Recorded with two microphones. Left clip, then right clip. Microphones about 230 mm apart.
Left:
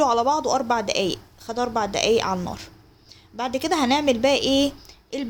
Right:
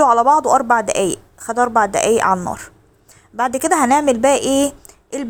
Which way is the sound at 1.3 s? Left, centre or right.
Right.